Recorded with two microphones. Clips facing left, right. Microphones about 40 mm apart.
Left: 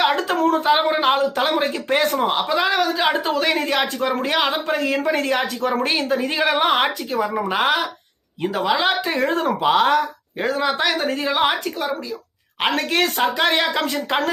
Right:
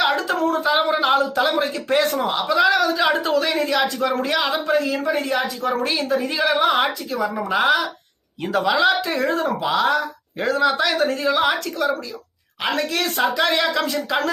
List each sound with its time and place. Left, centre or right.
0.0 s speech: left
3.0 s speech: left
3.3 s speech: left
4.3 s speech: left
4.7 s a woman's voice: left
8.5 s speech: centre
8.8 s speech: left
12.6 s a woman's voice: left